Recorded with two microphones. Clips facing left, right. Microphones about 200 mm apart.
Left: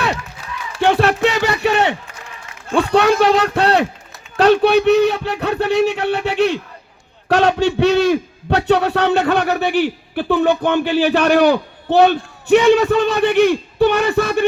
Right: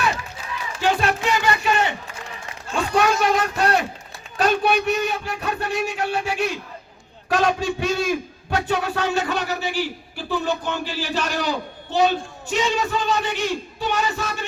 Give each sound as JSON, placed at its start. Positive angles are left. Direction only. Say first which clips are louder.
{"t": 0.8, "sound": "speech", "louder": "left 7 dB", "side_deg": 70}